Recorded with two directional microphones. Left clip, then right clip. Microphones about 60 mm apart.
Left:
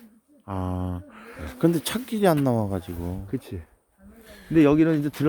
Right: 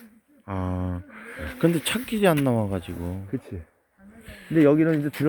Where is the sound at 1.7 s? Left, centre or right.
Left.